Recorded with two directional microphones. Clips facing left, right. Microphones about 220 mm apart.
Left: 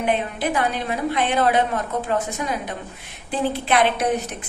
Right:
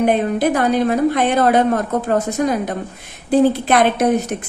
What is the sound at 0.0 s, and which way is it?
A woman's voice, 45° right (ahead or behind).